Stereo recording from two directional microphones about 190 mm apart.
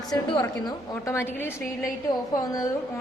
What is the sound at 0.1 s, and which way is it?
Speech, 25° left (ahead or behind).